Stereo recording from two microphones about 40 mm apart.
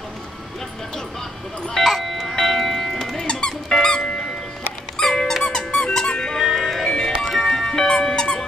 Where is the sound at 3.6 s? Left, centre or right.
Centre.